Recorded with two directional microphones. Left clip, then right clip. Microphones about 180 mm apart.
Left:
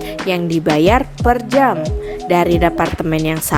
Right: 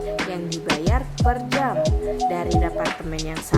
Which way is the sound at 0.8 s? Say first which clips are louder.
Left 12 dB; 45° left (ahead or behind).